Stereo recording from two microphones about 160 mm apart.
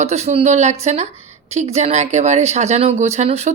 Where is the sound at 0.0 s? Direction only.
40° right (ahead or behind).